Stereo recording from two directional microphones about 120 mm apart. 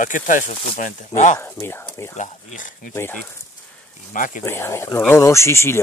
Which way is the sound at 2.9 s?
20° left (ahead or behind).